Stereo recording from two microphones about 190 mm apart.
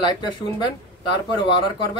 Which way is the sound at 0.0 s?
20° left (ahead or behind).